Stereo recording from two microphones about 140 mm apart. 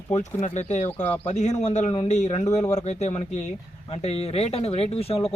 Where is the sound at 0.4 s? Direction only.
55° left (ahead or behind).